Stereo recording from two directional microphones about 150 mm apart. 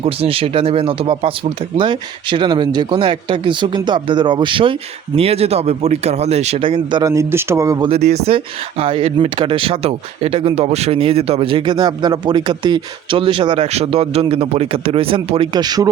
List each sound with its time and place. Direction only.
0.0 s speech: 40° right (ahead or behind)
7.1 s speech: 20° right (ahead or behind)
7.9 s speech: 45° right (ahead or behind); by 15.9 s 25° right (ahead or behind)